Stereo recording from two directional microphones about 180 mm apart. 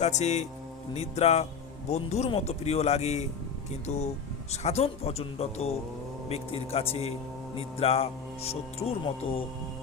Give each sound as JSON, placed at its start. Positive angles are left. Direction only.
{"t": 0.0, "sound": "speech", "side_deg": 40}